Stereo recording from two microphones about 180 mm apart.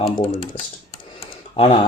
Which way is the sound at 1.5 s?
25° left (ahead or behind).